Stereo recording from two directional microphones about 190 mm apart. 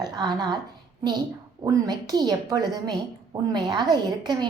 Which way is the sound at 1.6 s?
20° right (ahead or behind).